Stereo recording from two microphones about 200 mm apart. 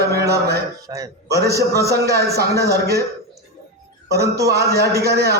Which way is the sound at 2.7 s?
50° right (ahead or behind).